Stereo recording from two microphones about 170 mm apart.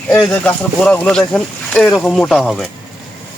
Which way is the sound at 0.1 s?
10° left (ahead or behind).